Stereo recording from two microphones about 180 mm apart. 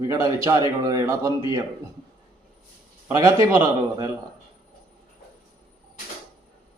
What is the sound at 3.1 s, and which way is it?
Speech, 15° right (ahead or behind).